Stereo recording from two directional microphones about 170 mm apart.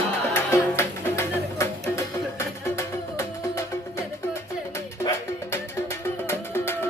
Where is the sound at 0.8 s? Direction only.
15° left (ahead or behind).